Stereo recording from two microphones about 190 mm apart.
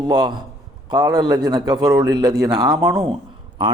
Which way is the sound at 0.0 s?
20° right (ahead or behind).